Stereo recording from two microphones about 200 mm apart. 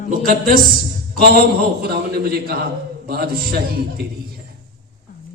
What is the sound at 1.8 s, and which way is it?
A man's voice, 50° right (ahead or behind).